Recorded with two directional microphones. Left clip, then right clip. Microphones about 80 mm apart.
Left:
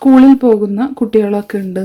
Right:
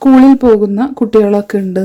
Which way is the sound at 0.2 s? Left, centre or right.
Right.